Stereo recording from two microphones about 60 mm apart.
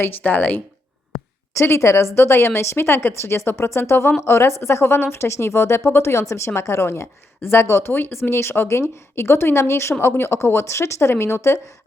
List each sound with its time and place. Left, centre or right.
0.0 s speech: left
1.5 s a woman's voice: left